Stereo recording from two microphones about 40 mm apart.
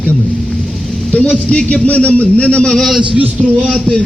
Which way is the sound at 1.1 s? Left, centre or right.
Left.